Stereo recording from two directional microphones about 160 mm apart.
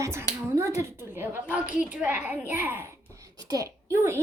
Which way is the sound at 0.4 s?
15° right (ahead or behind).